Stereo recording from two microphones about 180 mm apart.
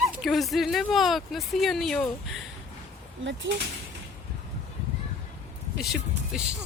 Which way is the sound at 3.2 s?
90° right.